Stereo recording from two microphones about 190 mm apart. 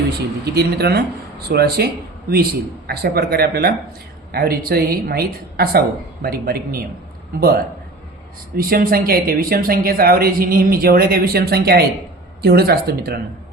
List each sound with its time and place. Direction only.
0.5 s a man's voice: 55° right (ahead or behind)